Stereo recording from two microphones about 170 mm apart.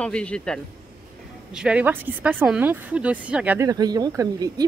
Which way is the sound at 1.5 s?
5° right (ahead or behind).